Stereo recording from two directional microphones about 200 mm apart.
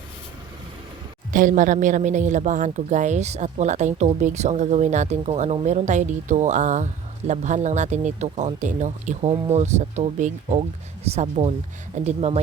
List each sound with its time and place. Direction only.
1.3 s a woman's voice: 40° right (ahead or behind)